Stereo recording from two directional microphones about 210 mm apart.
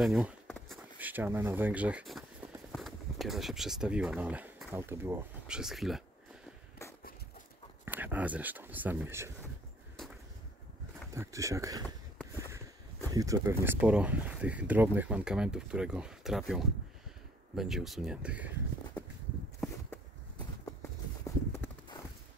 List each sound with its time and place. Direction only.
0.0 s speech: centre (ahead or behind)
7.8 s speech: 10° right (ahead or behind)
11.1 s speech: 15° right (ahead or behind)
12.4 s a sound: 15° right (ahead or behind)
13.1 s speech: 15° right (ahead or behind)
21.2 s clip-clop: 10° left (ahead or behind)